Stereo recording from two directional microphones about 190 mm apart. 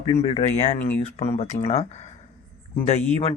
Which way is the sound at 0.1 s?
35° left (ahead or behind).